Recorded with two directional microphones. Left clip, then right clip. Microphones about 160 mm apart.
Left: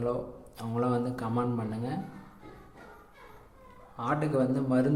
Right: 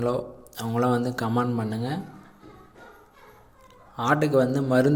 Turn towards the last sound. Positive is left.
turn(degrees=-25)  # may be behind; listen again after turning